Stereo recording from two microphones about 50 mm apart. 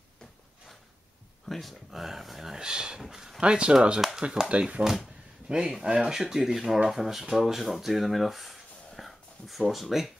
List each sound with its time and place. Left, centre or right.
1.5 s speech: centre; by 4.8 s right
5.9 s speech: centre